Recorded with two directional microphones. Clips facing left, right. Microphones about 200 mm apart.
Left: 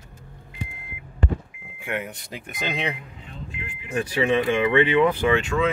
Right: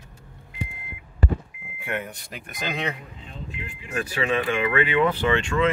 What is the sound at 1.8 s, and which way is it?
Speech, 10° left (ahead or behind).